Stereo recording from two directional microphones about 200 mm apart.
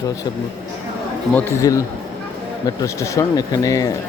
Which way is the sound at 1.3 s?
10° left (ahead or behind).